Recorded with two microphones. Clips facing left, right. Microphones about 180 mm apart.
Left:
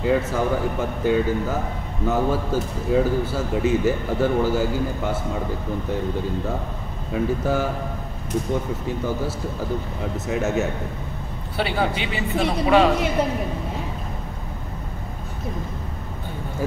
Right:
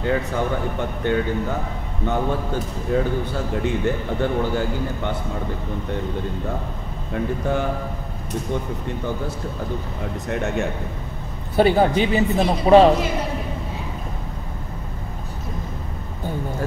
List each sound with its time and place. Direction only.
0.0 s speech: 5° left (ahead or behind)
7.1 s speech: 5° left (ahead or behind)
10.1 s speech: 5° left (ahead or behind)
11.5 s speech: 45° right (ahead or behind)